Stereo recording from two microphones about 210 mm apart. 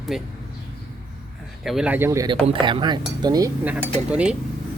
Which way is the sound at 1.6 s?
Centre (ahead or behind).